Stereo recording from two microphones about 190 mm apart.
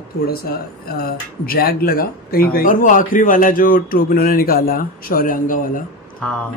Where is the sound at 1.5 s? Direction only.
50° left (ahead or behind).